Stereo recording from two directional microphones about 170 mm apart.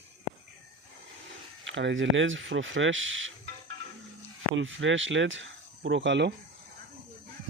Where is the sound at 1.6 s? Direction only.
90° right.